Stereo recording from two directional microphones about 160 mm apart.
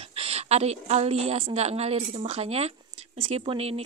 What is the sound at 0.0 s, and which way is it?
A woman's voice, 40° right (ahead or behind).